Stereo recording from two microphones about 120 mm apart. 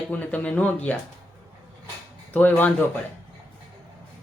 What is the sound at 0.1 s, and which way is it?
Speech, 10° left (ahead or behind).